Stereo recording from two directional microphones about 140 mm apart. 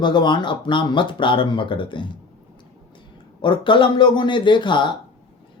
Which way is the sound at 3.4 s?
35° left (ahead or behind).